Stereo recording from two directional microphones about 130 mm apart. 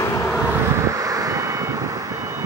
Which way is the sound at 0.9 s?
25° right (ahead or behind).